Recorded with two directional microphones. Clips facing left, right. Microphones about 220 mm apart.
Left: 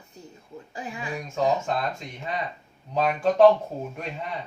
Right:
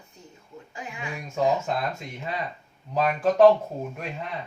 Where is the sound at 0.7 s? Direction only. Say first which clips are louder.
Left 3 dB; 35° left (ahead or behind).